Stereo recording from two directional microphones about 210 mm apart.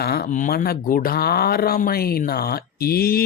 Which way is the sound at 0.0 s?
50° left (ahead or behind).